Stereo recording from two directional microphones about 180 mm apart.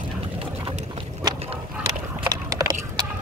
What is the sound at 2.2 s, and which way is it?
Horse, 20° right (ahead or behind).